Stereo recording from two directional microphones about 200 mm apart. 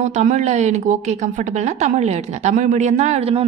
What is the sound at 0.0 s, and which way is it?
A woman's voice, 35° right (ahead or behind).